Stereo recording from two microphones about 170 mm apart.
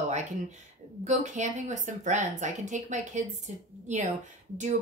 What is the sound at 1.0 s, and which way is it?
Speech, 45° right (ahead or behind).